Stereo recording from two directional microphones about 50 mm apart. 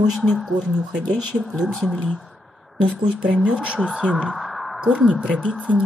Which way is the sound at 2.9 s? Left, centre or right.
Right.